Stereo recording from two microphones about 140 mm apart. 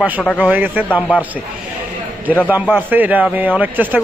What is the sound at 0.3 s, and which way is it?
Speech, 10° right (ahead or behind).